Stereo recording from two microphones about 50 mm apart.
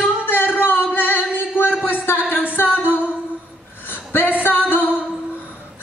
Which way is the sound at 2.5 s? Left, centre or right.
Left.